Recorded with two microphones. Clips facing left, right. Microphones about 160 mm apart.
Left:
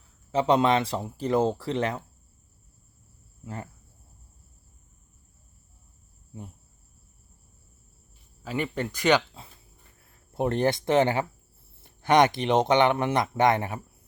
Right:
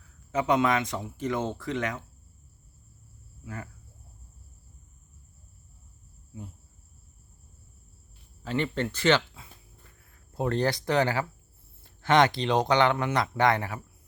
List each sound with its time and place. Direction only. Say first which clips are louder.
0.3 s speech: left 3 dB; 30° left (ahead or behind)
3.4 s speech: left 2 dB; 30° left (ahead or behind)
8.4 s speech: right 1 dB; 10° left (ahead or behind)